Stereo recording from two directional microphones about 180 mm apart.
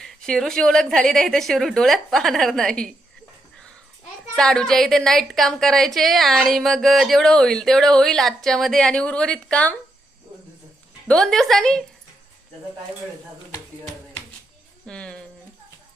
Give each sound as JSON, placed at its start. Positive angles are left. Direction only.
{"t": 0.0, "sound": "a woman's voice", "side_deg": 5}
{"t": 4.4, "sound": "a woman's voice", "side_deg": 5}
{"t": 11.1, "sound": "a woman's voice", "side_deg": 5}
{"t": 14.8, "sound": "a sound", "side_deg": 5}